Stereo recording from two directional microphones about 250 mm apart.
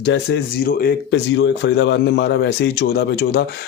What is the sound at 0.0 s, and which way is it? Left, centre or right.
Speech, left.